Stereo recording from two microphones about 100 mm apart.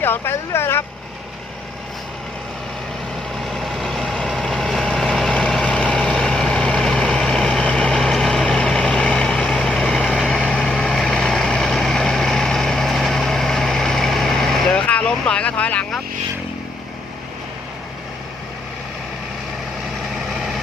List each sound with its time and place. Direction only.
0.0 s speech: 20° left (ahead or behind)
3.3 s vehicle: centre (ahead or behind)
20.1 s vehicle: centre (ahead or behind)